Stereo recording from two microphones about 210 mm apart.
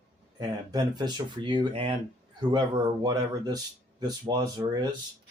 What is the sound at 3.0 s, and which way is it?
Speech, 20° right (ahead or behind).